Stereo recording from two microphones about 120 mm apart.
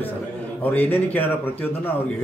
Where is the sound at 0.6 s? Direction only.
15° left (ahead or behind).